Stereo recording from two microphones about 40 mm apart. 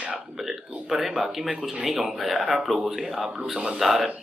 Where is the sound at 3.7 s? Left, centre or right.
Centre.